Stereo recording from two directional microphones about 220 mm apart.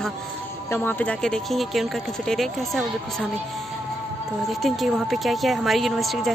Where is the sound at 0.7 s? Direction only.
10° left (ahead or behind).